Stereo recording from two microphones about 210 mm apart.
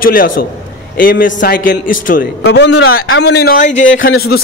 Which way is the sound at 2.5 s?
55° left (ahead or behind).